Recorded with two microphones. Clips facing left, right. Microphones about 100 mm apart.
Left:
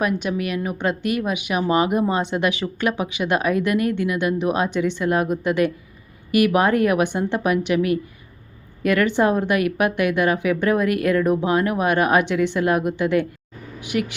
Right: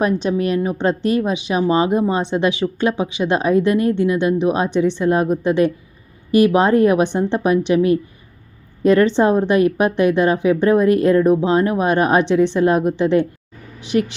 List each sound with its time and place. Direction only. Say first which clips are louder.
0.2 s speech: right 6 dB; 30° right (ahead or behind)